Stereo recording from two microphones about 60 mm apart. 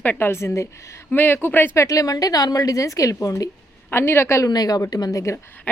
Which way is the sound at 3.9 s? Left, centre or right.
Left.